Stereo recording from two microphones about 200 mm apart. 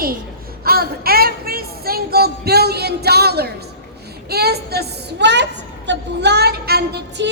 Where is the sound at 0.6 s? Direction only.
50° right (ahead or behind).